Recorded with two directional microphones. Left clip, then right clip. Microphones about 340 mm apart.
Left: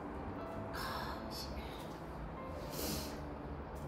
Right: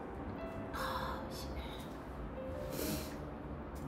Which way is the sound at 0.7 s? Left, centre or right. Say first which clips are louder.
Right 4 dB; centre.